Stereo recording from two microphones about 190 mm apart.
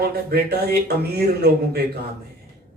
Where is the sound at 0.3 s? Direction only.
55° right (ahead or behind).